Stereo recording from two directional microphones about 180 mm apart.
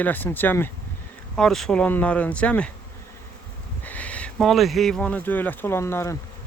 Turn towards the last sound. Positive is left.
turn(degrees=15)  # may be behind; listen again after turning